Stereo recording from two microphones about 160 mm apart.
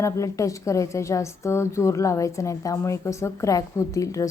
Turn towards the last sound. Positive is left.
turn(degrees=20)  # may be behind; listen again after turning